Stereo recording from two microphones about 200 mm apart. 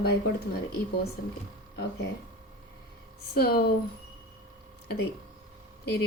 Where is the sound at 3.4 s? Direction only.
50° left (ahead or behind).